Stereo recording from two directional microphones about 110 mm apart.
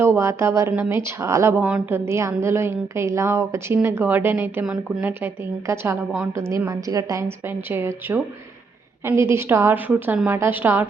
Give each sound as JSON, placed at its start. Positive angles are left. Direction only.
{"t": 0.0, "sound": "a woman's voice", "side_deg": -25}
{"t": 1.6, "sound": "a woman's voice", "side_deg": -10}
{"t": 2.0, "sound": "a woman's voice", "side_deg": -25}